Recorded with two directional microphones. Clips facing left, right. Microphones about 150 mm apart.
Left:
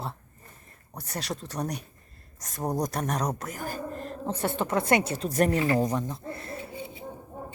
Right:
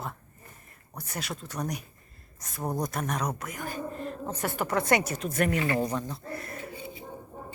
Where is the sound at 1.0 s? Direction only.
35° left (ahead or behind).